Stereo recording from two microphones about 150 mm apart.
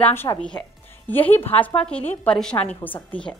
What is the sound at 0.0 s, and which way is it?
A woman's voice, 15° left (ahead or behind).